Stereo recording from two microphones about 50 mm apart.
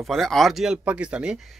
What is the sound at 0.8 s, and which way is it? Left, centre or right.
Speech, right.